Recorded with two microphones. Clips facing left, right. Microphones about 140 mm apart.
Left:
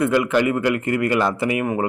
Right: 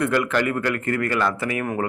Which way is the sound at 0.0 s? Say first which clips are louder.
Left 3 dB; 10° left (ahead or behind).